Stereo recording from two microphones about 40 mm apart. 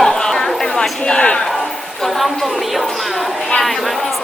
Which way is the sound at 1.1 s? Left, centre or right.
Left.